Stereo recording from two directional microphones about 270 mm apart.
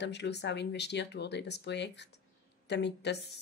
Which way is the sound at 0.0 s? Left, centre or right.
Left.